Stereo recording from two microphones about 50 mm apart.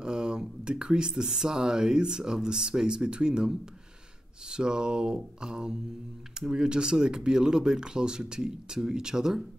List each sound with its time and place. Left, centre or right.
0.0 s speech: centre